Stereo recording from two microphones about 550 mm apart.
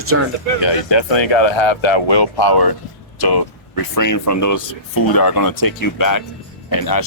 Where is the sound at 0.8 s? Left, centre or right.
Left.